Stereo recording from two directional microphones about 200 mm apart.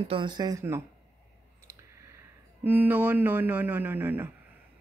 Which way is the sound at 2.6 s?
10° right (ahead or behind).